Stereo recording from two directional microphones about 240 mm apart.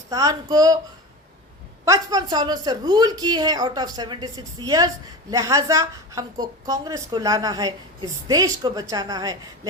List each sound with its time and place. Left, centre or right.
0.1 s a woman's voice: centre
1.8 s a woman's voice: centre